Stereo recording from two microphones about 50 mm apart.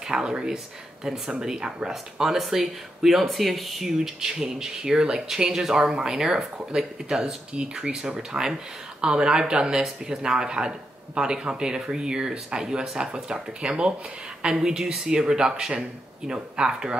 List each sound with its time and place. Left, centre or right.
0.0 s speech: centre